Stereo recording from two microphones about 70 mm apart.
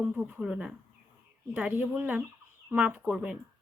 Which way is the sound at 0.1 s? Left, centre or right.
Centre.